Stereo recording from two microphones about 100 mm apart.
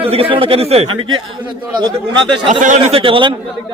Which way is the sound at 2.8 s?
70° right (ahead or behind).